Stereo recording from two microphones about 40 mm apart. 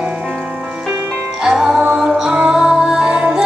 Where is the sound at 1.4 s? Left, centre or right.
Centre.